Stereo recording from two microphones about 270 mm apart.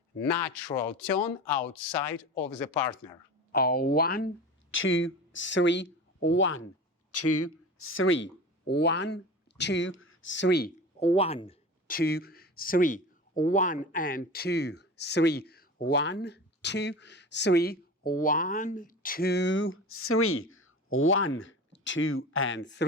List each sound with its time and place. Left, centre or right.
0.2 s speech: centre
3.5 s speech: left
4.7 s speech: left
7.1 s speech: left
11.0 s speech: left
11.9 s speech: left